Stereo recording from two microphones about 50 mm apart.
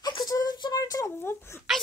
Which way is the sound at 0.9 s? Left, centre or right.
Left.